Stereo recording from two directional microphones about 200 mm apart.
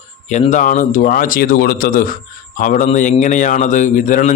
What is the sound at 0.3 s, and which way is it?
A man's voice, 35° left (ahead or behind).